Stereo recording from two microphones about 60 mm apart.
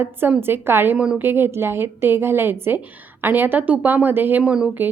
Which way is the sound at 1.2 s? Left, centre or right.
Right.